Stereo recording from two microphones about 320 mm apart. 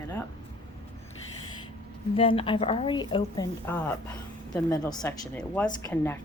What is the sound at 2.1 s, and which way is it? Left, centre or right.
A woman's voice, centre.